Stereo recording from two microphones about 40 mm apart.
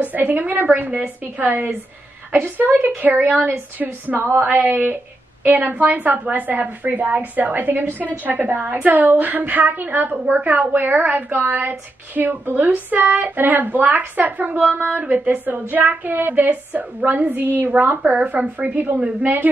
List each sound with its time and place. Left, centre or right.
0.0 s a woman's voice: right
3.4 s a woman's voice: right
10.3 s a woman's voice: right
18.2 s a woman's voice: right